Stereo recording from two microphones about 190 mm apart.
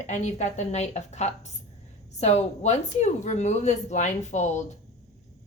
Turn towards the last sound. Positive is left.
turn(degrees=35)  # may be behind; listen again after turning